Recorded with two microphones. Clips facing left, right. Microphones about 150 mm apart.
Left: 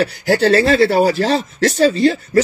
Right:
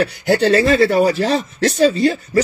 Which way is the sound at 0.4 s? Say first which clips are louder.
Left 1 dB; 35° left (ahead or behind).